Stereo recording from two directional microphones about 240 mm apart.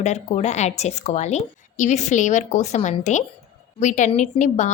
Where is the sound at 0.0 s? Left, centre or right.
Left.